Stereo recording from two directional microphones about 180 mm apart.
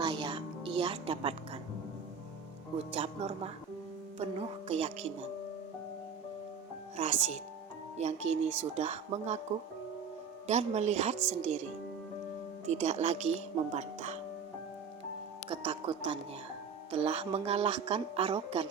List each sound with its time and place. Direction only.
0.0 s music: 25° right (ahead or behind)
2.7 s a woman's voice: 35° right (ahead or behind)
6.9 s a woman's voice: 40° right (ahead or behind)
10.4 s a woman's voice: 40° right (ahead or behind)
15.4 s a woman's voice: 30° right (ahead or behind)